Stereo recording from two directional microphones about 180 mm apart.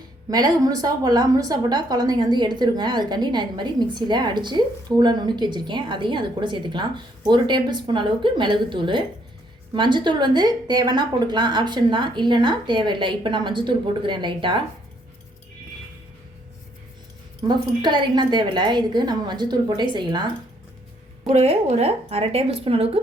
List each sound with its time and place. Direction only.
0.3 s a woman's voice: 20° right (ahead or behind)
17.5 s a woman's voice: 25° right (ahead or behind)
21.2 s a woman's voice: 35° right (ahead or behind)